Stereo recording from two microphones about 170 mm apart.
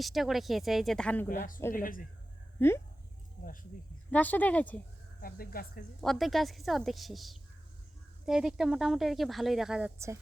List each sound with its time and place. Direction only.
0.0 s speech: centre (ahead or behind)
1.3 s speech: 55° left (ahead or behind)
2.6 s speech: 15° left (ahead or behind)
4.1 s speech: 10° left (ahead or behind)
5.2 s speech: 60° left (ahead or behind)
6.0 s speech: centre (ahead or behind)